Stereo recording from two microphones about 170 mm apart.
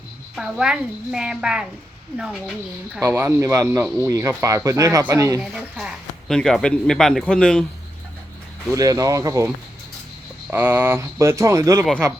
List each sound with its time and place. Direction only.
0.3 s speech: 5° right (ahead or behind)
5.4 s speech: 5° right (ahead or behind)
8.7 s speech: 20° right (ahead or behind)
10.5 s speech: 10° right (ahead or behind)